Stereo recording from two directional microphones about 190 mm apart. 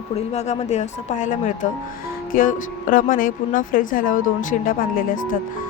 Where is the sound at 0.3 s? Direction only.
35° left (ahead or behind).